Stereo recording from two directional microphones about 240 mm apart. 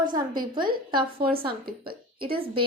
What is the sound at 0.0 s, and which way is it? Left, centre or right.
Speech, centre.